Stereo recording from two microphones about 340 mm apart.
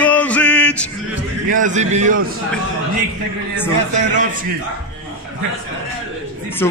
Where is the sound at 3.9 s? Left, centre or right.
Right.